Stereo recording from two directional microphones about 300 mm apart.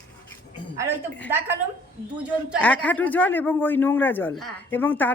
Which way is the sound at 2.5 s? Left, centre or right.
Centre.